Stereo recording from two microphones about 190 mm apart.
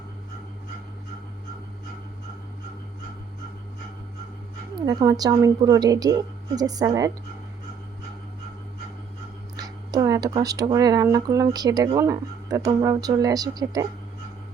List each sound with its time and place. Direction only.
4.9 s speech: 20° right (ahead or behind)
9.6 s speech: 20° right (ahead or behind)